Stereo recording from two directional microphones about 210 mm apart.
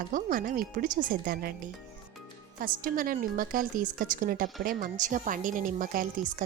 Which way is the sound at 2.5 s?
40° right (ahead or behind).